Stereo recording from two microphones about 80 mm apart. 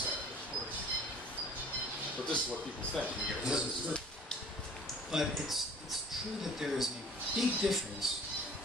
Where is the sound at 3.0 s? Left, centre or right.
Centre.